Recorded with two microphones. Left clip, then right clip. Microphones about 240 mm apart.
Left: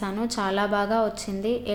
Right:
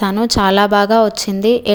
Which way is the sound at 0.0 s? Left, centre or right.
Right.